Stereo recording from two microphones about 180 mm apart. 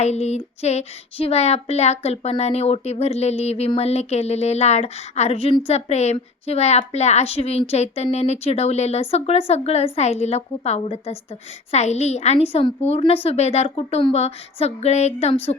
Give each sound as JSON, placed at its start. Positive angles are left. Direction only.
{"t": 0.0, "sound": "speech", "side_deg": 35}